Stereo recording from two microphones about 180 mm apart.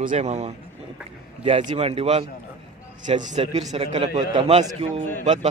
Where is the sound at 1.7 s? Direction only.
35° right (ahead or behind).